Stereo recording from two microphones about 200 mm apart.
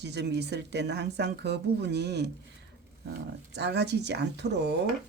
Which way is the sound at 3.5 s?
60° right (ahead or behind).